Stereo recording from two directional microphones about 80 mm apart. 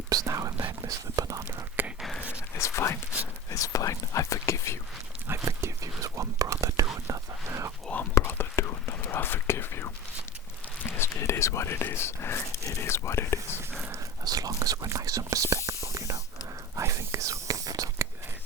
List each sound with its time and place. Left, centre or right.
0.1 s whispering: right
0.8 s speech: right
1.8 s a sound: right
2.3 s a sound: left
3.5 s speech: left
5.3 s whispering: right
8.1 s whispering: left
14.3 s whispering: right